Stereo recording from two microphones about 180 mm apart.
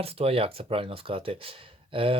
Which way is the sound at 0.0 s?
35° right (ahead or behind).